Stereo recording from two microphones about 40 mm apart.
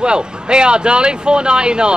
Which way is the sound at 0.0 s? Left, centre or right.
Right.